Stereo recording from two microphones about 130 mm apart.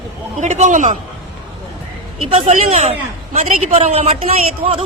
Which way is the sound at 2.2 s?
55° right (ahead or behind).